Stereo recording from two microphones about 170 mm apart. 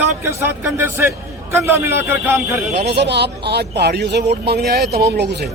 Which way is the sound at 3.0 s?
80° right.